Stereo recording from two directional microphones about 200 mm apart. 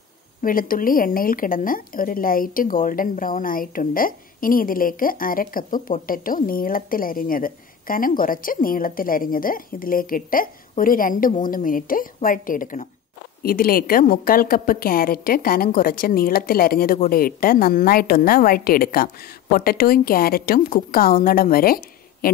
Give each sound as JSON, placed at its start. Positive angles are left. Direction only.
{"t": 0.4, "sound": "speech", "side_deg": 45}